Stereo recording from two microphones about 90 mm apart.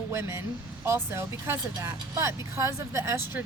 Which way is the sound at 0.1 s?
30° right (ahead or behind).